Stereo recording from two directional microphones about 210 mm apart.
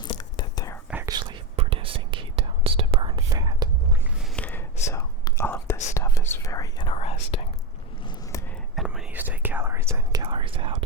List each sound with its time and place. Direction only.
0.1 s whispering: 20° left (ahead or behind)
0.9 s whispering: 10° right (ahead or behind)
1.1 s whispering: 20° right (ahead or behind)
4.4 s whispering: 10° left (ahead or behind); by 7.4 s 30° left (ahead or behind)
8.7 s whispering: centre (ahead or behind); by 10.8 s 25° right (ahead or behind)